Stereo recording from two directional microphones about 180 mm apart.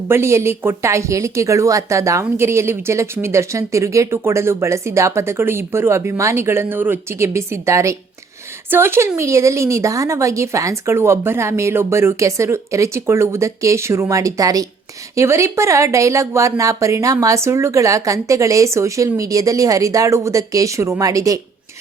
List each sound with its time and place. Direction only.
0.1 s speech: 15° right (ahead or behind)